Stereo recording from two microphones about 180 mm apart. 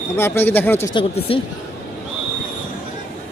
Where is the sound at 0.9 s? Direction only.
30° left (ahead or behind).